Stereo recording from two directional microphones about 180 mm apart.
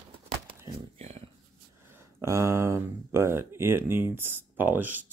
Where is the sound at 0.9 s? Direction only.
35° right (ahead or behind).